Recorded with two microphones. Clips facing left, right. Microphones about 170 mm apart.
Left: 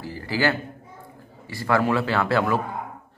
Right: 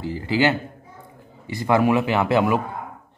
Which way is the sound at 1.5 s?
20° right (ahead or behind).